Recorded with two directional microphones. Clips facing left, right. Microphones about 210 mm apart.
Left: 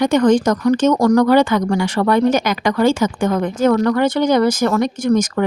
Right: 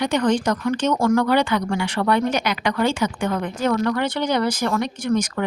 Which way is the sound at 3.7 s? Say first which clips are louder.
Left 4 dB; 65° left (ahead or behind).